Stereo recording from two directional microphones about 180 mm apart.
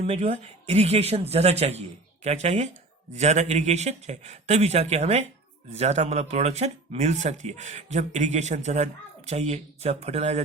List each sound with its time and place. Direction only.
0.0 s speech: 35° right (ahead or behind)